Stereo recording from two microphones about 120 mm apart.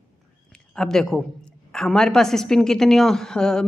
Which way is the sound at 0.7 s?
5° left (ahead or behind).